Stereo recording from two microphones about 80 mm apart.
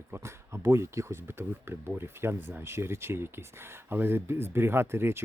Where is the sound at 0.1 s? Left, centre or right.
Right.